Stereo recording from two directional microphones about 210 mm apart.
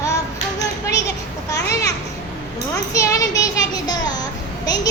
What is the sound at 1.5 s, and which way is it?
Children playing, 15° left (ahead or behind).